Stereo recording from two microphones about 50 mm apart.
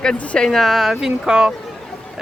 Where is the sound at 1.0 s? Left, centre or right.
Centre.